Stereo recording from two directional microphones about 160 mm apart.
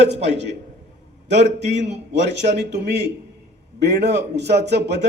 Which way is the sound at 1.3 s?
90° right.